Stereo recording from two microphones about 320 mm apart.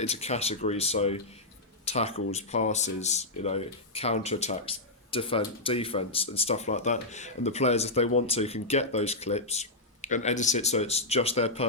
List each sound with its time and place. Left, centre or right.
0.0 s speech: centre